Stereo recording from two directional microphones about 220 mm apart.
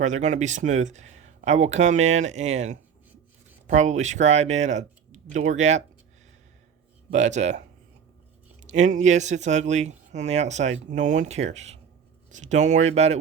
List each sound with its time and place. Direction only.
0.0 s speech: 35° right (ahead or behind)
7.1 s speech: 35° right (ahead or behind)
8.6 s speech: 35° right (ahead or behind)